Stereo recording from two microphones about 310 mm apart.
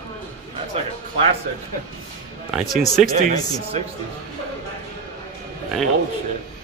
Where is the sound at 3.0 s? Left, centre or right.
Right.